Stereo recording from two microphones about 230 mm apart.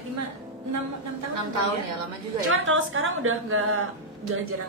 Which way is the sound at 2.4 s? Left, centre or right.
Right.